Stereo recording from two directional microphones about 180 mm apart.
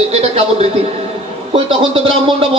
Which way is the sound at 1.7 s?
30° right (ahead or behind).